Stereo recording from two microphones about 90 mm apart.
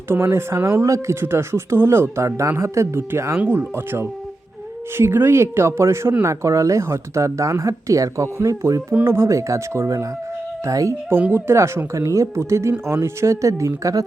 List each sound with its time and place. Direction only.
0.1 s speech: 30° right (ahead or behind)